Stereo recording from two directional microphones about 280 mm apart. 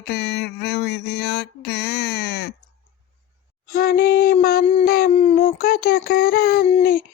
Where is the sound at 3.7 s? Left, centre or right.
Left.